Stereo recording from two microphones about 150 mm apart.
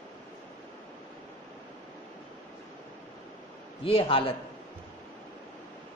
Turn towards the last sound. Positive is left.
turn(degrees=40)  # may be behind; listen again after turning